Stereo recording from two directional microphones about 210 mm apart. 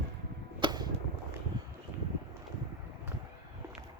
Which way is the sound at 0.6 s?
20° right (ahead or behind).